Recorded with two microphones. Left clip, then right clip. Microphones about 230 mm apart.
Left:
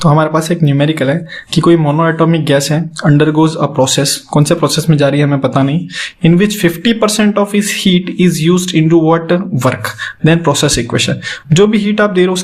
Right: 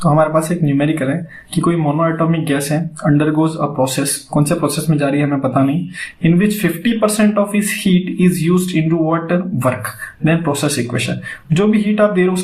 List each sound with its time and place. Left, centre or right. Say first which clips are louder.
0.0 s speech: left 2 dB; left